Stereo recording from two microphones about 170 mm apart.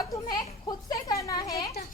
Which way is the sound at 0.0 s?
25° left (ahead or behind).